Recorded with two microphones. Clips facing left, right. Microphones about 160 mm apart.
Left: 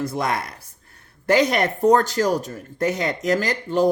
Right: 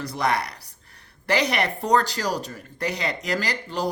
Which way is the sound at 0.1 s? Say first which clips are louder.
Even; 50° left (ahead or behind).